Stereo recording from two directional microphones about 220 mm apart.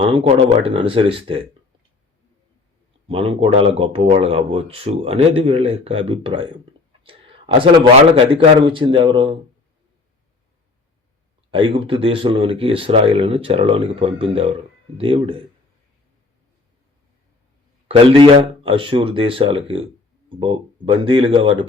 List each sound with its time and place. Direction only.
0.0 s speech: 25° right (ahead or behind)
3.1 s speech: 25° right (ahead or behind)
7.0 s a sound: 25° right (ahead or behind)
8.1 s speech: 25° right (ahead or behind)
11.5 s speech: 25° right (ahead or behind)
17.8 s speech: 25° right (ahead or behind)